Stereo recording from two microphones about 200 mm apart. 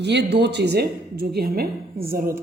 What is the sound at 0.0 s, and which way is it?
Speech, 60° right (ahead or behind).